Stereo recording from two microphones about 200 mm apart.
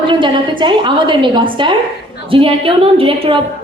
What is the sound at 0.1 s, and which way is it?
A woman's voice, 25° right (ahead or behind).